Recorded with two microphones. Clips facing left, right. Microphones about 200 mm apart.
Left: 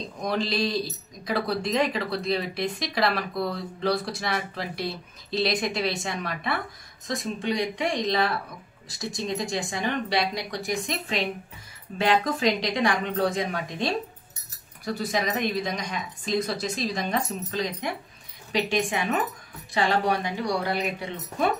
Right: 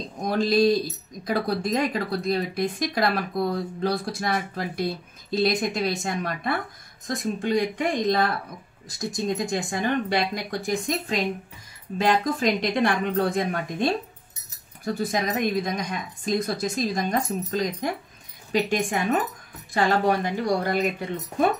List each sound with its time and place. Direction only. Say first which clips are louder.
0.2 s speech: right 6 dB; 50° right (ahead or behind)